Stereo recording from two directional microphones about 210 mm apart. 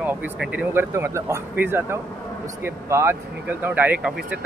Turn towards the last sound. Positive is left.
turn(degrees=-10)  # may be behind; listen again after turning